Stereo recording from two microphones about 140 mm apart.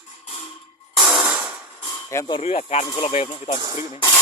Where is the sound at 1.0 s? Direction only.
5° right (ahead or behind).